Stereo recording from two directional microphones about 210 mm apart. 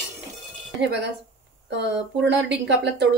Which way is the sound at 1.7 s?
55° right (ahead or behind).